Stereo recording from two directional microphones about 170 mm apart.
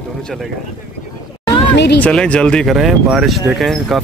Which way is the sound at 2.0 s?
5° left (ahead or behind).